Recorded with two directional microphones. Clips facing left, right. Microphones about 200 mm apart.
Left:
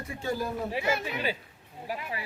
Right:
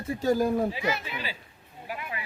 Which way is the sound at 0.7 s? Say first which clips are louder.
Left 1 dB; 55° left (ahead or behind).